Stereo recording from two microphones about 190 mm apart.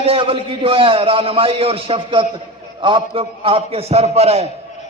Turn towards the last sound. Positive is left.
turn(degrees=-35)  # may be behind; listen again after turning